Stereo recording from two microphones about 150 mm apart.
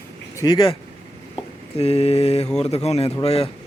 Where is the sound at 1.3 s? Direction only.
40° left (ahead or behind).